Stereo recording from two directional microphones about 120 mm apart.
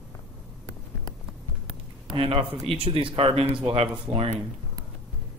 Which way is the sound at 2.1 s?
45° right (ahead or behind).